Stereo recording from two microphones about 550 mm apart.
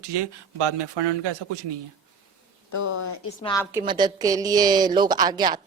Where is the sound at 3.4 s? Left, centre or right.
Centre.